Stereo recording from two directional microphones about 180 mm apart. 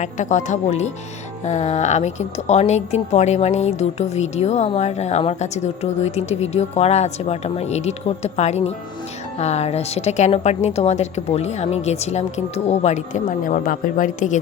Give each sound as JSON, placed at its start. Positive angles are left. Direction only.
{"t": 0.0, "sound": "a woman's voice", "side_deg": 40}